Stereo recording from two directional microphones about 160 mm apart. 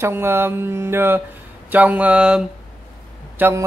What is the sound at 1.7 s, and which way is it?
Mantra, 10° right (ahead or behind).